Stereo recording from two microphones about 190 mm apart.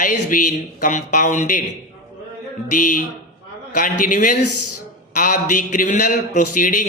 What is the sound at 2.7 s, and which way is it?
Speech, 45° left (ahead or behind).